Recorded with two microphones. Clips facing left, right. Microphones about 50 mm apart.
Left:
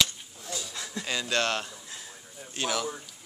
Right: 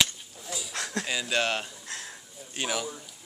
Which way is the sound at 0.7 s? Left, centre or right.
Right.